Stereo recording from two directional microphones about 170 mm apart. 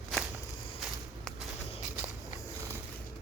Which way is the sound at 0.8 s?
5° right (ahead or behind).